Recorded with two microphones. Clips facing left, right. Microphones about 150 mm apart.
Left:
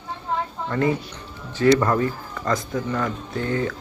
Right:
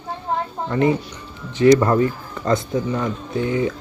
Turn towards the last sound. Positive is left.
turn(degrees=-15)  # may be behind; listen again after turning